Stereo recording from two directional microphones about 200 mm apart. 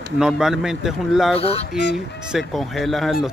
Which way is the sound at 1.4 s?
30° left (ahead or behind).